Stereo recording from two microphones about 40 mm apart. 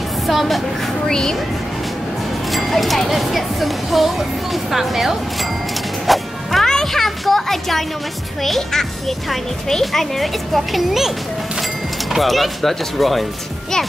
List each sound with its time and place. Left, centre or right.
0.3 s speech: centre
1.0 s speech: centre
2.5 s speech: centre
6.0 s music: centre
6.6 s music: centre
8.5 s speech: centre
12.2 s speech: centre